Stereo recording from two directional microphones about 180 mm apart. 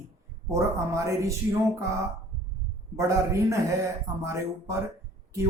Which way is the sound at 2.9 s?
15° right (ahead or behind).